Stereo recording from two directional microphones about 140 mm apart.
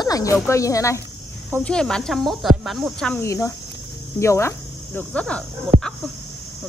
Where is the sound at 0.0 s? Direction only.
25° left (ahead or behind).